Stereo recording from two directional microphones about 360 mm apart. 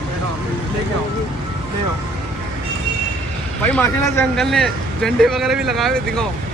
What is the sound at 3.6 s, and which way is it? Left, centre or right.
Speech, centre.